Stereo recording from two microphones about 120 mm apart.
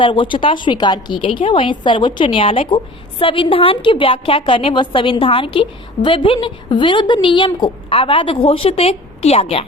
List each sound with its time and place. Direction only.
0.0 s a woman's voice: 45° left (ahead or behind)